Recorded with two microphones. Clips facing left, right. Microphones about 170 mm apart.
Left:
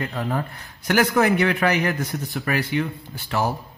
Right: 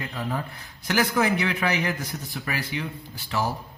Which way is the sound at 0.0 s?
60° left (ahead or behind).